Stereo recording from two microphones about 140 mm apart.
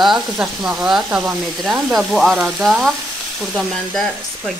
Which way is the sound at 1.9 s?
Centre (ahead or behind).